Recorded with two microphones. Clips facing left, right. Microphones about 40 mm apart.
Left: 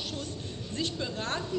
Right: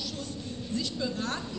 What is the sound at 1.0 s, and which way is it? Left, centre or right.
Speech, left.